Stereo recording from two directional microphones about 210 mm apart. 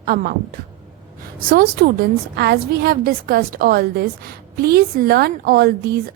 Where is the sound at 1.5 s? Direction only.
45° right (ahead or behind).